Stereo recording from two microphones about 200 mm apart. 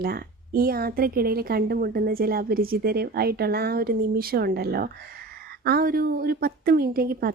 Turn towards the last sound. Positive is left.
turn(degrees=-50)  # may be behind; listen again after turning